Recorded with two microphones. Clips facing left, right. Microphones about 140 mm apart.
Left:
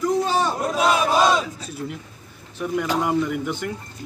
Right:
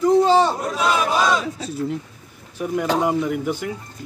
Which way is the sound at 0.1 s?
25° right (ahead or behind).